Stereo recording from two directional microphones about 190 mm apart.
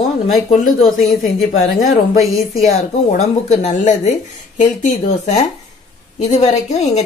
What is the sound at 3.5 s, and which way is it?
A woman's voice, 40° left (ahead or behind).